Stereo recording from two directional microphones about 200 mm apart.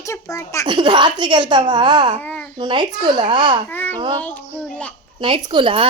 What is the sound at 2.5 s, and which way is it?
A woman's voice, 25° right (ahead or behind).